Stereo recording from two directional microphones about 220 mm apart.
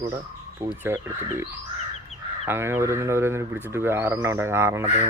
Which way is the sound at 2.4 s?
10° right (ahead or behind).